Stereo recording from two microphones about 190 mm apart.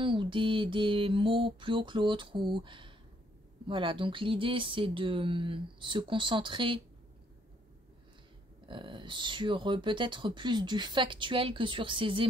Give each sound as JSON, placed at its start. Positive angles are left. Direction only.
{"t": 0.0, "sound": "speech", "side_deg": -25}
{"t": 8.6, "sound": "speech", "side_deg": -25}